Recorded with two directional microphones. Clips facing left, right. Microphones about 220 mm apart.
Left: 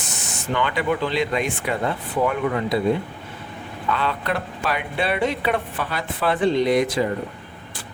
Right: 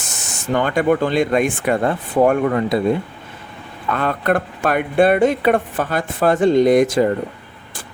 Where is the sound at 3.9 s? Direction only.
50° right (ahead or behind).